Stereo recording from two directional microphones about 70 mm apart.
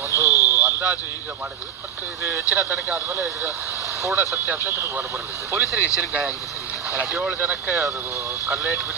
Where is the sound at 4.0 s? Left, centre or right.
Right.